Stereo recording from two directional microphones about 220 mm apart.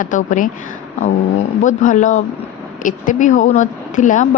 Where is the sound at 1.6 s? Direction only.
35° left (ahead or behind).